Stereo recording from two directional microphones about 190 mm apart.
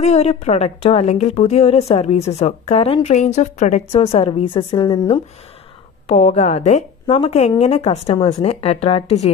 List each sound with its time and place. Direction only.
0.0 s a woman's voice: 35° left (ahead or behind)
6.0 s a woman's voice: 30° left (ahead or behind)